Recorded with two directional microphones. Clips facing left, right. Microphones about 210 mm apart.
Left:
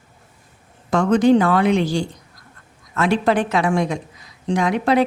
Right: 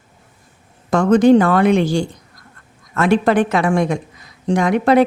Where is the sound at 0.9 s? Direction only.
45° right (ahead or behind).